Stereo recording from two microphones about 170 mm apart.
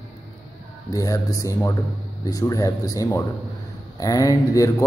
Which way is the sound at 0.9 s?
20° left (ahead or behind).